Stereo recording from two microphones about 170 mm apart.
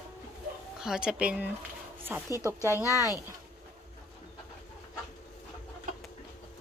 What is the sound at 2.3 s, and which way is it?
Speech, 15° left (ahead or behind).